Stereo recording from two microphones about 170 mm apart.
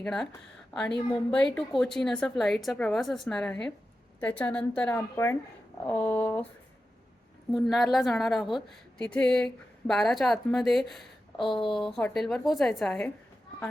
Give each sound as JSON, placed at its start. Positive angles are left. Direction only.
{"t": 0.0, "sound": "a woman's voice", "side_deg": 5}
{"t": 7.5, "sound": "a woman's voice", "side_deg": 0}
{"t": 11.4, "sound": "speech", "side_deg": 30}
{"t": 11.7, "sound": "a woman's voice", "side_deg": 0}